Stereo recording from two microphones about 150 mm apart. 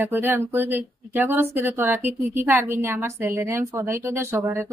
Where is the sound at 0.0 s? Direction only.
15° right (ahead or behind).